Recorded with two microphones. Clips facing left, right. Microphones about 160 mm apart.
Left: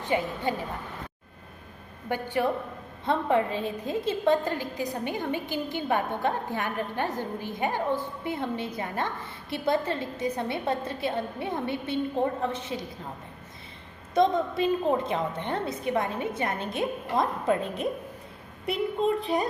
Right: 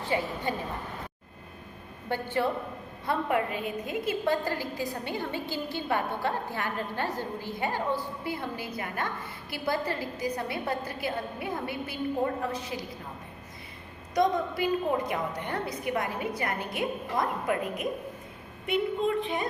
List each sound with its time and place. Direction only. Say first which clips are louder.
0.0 s a woman's voice: left 2 dB; 20° left (ahead or behind)
2.0 s a woman's voice: left 1 dB; 15° left (ahead or behind)
3.1 s a woman's voice: left 3 dB; 25° left (ahead or behind)
14.1 s a woman's voice: left 3 dB; 25° left (ahead or behind)